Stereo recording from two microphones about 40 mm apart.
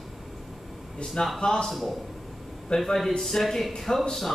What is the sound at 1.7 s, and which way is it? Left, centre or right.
Speech, centre.